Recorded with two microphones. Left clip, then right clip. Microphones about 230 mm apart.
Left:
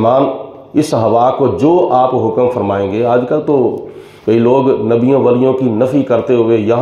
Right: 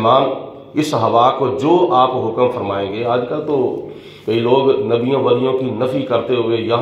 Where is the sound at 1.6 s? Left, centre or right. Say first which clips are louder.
Left 3 dB; left.